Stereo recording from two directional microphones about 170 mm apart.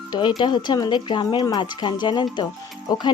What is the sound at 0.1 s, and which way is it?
Speech, 25° left (ahead or behind).